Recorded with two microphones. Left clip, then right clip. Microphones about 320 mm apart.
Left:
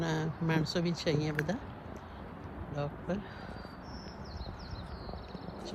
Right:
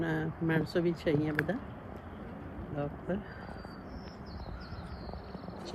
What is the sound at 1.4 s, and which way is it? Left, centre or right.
Speech, centre.